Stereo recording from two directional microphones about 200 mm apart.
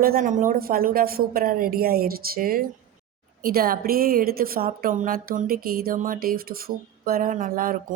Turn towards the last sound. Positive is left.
turn(degrees=-45)  # may be behind; listen again after turning